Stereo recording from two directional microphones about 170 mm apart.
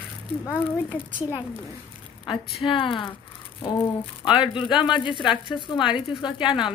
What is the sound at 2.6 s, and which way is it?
Speech, 30° left (ahead or behind).